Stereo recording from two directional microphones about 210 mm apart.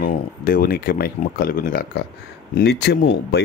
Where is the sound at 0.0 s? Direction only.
45° left (ahead or behind).